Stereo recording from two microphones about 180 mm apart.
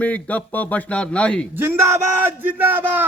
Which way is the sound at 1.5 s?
10° right (ahead or behind).